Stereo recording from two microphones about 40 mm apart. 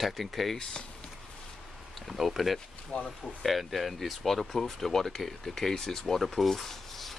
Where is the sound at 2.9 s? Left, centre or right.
Left.